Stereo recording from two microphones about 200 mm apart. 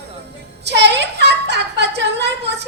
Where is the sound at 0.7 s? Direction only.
60° right (ahead or behind).